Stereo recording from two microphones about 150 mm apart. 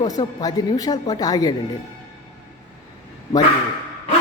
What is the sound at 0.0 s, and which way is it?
Speech, 25° left (ahead or behind).